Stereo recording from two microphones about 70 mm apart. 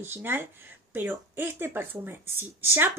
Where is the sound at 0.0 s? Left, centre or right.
Right.